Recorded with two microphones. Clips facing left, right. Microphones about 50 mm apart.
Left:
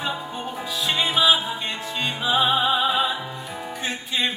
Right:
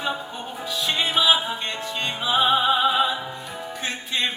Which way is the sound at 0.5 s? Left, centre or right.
Centre.